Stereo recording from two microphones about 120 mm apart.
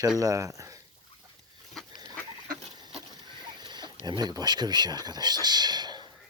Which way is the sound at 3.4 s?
35° right (ahead or behind).